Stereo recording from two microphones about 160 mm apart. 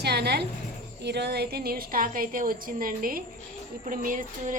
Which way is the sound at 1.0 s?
90° right.